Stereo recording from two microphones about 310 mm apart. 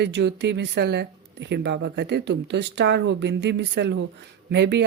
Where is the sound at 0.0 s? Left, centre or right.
Right.